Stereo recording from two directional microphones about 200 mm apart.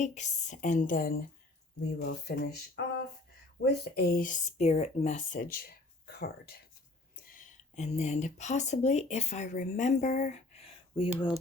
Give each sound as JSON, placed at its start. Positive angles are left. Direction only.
{"t": 0.0, "sound": "a woman's voice", "side_deg": 35}
{"t": 7.3, "sound": "speech", "side_deg": 40}